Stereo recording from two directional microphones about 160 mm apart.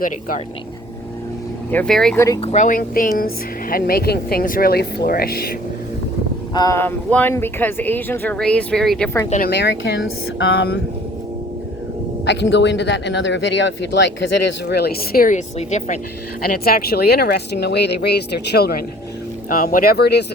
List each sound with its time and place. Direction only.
0.0 s speech: 55° left (ahead or behind)
1.7 s speech: 5° left (ahead or behind)
2.1 s speech: 20° left (ahead or behind)
2.4 s speech: 45° left (ahead or behind); by 5.5 s 75° left (ahead or behind)
6.5 s speech: 20° left (ahead or behind); by 9.0 s 5° left (ahead or behind)
9.5 s speech: 90° left
12.2 s speech: 90° left
14.7 s speech: 85° left; by 16.0 s 50° left (ahead or behind)
16.5 s speech: 70° left (ahead or behind)
19.5 s speech: 60° left (ahead or behind); by 20.2 s 90° left